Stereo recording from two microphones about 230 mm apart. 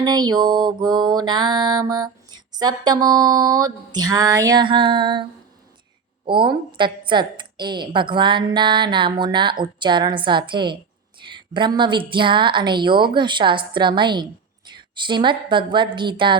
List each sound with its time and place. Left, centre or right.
0.0 s music: centre
6.2 s a woman's voice: right